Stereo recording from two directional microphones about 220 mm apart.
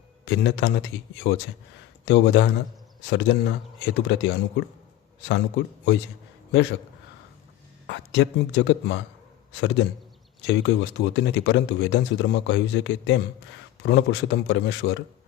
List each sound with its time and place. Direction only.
0.3 s a man's voice: 50° left (ahead or behind)
7.9 s speech: 55° left (ahead or behind)